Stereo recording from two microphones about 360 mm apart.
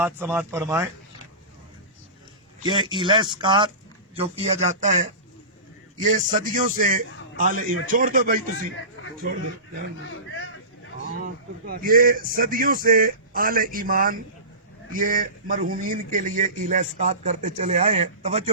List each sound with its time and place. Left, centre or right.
0.0 s speech: centre
2.6 s speech: centre
9.0 s a sound: left
10.0 s a man's voice: left
11.2 s speech: right